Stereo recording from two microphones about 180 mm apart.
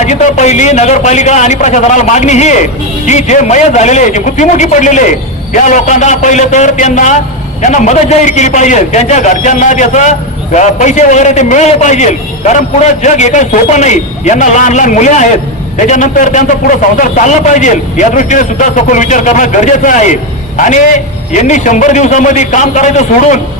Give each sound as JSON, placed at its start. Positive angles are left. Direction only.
{"t": 0.0, "sound": "a man's voice", "side_deg": 40}